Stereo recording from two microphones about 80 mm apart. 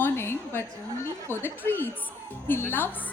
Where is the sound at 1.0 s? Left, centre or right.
Left.